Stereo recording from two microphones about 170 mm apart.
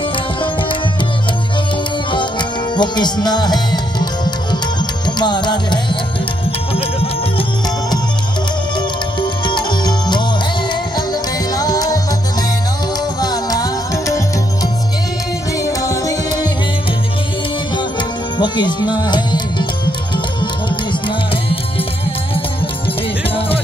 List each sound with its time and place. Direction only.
2.7 s music: 25° left (ahead or behind)
9.2 s music: 25° left (ahead or behind)
11.5 s music: 20° left (ahead or behind)
13.2 s music: 20° left (ahead or behind)
15.6 s music: 20° left (ahead or behind)
18.4 s music: 25° left (ahead or behind)